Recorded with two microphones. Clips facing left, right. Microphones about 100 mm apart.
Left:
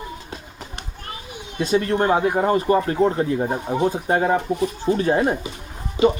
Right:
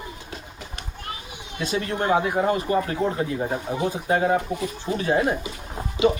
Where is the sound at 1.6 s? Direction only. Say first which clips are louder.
Left 6 dB; 40° left (ahead or behind).